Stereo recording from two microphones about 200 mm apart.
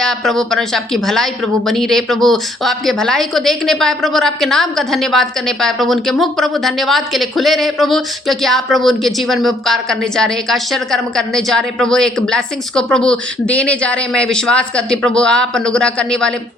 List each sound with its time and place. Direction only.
0.0 s speech: centre (ahead or behind)